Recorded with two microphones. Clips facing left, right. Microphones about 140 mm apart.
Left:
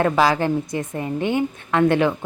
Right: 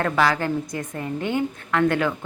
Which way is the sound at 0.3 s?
20° left (ahead or behind).